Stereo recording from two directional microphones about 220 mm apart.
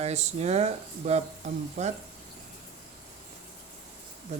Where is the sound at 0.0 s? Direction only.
30° right (ahead or behind).